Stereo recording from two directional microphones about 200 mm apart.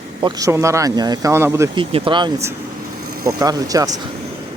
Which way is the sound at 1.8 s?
25° right (ahead or behind).